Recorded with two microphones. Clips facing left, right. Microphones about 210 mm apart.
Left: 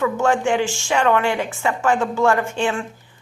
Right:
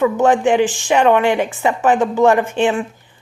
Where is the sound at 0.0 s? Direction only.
20° right (ahead or behind).